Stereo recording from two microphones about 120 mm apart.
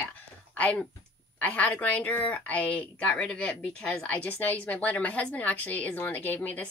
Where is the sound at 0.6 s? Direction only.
10° left (ahead or behind).